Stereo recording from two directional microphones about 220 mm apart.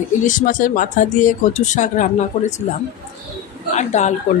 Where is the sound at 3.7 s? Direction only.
30° left (ahead or behind).